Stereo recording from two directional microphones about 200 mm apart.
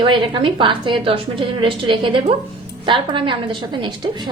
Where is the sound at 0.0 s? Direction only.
25° right (ahead or behind).